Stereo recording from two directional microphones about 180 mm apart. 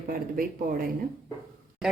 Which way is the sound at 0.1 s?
50° right (ahead or behind).